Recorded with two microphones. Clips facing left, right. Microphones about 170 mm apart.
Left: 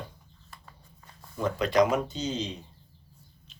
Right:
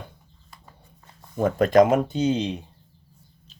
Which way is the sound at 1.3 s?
50° right (ahead or behind).